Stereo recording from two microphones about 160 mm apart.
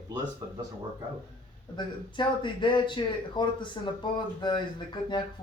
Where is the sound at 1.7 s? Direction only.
30° left (ahead or behind).